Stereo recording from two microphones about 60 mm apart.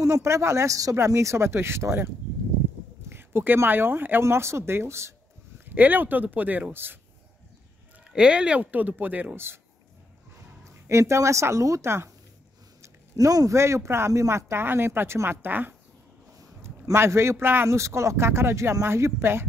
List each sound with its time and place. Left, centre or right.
0.0 s speech: right
4.2 s speech: right
5.7 s speech: right
8.1 s speech: centre
10.6 s speech: right
12.8 s a sound: right
13.6 s speech: right
16.9 s speech: right
17.6 s speech: right